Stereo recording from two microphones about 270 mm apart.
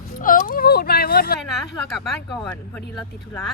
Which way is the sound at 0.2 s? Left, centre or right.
Left.